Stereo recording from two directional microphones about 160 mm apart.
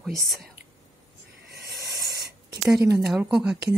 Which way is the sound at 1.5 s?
80° right.